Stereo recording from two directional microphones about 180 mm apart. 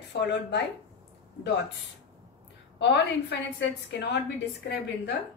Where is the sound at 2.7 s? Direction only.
75° left (ahead or behind).